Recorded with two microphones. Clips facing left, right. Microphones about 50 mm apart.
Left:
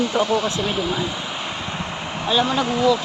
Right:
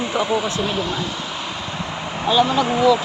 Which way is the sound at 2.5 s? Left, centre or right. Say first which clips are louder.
Right 2 dB; right.